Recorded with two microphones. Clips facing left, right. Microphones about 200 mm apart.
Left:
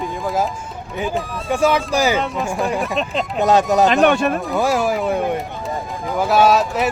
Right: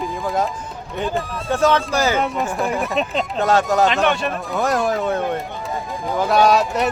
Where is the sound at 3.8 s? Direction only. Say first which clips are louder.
Left 4 dB; 50° left (ahead or behind).